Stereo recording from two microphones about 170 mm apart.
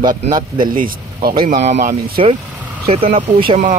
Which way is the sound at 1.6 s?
45° right (ahead or behind).